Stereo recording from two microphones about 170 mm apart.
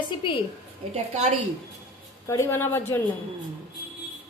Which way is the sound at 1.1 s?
40° right (ahead or behind).